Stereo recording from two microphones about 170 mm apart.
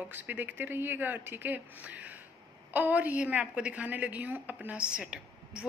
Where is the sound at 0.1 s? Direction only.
10° right (ahead or behind).